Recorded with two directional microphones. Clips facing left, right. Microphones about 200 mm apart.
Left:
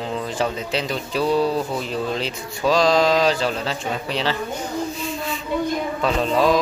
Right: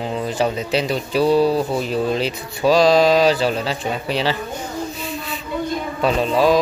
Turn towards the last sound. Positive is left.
turn(degrees=-5)  # may be behind; listen again after turning